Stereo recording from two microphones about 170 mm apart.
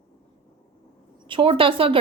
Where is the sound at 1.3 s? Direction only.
30° right (ahead or behind).